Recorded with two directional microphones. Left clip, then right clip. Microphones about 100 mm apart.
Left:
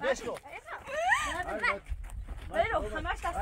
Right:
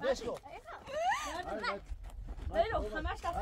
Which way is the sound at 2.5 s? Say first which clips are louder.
Left 3 dB; 35° right (ahead or behind).